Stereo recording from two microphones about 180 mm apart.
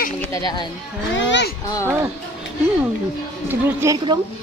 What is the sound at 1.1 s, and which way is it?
Speech, 80° left.